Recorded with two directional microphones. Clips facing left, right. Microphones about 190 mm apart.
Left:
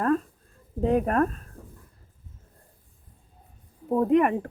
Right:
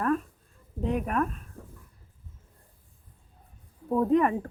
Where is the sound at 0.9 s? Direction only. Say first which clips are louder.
Left 5 dB; 35° left (ahead or behind).